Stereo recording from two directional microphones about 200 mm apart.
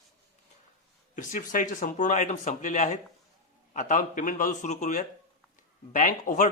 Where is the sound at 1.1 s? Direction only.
40° left (ahead or behind).